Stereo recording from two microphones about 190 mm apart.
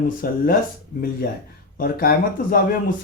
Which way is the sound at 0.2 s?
50° left (ahead or behind).